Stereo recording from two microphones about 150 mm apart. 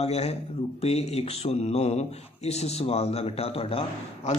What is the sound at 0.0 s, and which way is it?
Speech, 45° left (ahead or behind).